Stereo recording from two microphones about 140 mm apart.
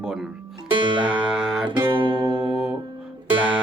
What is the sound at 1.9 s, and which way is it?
Music, 35° right (ahead or behind).